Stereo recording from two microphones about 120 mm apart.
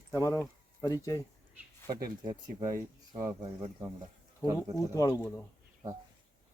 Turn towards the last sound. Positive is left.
turn(degrees=30)  # may be behind; listen again after turning